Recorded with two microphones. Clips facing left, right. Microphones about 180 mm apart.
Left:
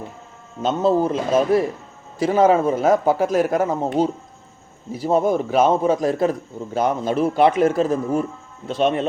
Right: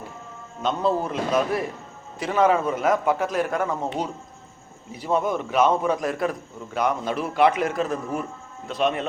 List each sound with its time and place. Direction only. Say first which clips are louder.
0.6 s a man's voice: left 5 dB; 30° left (ahead or behind)
4.9 s a man's voice: left 5 dB; 35° left (ahead or behind)